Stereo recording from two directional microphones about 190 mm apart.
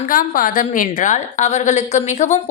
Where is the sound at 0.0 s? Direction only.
45° left (ahead or behind).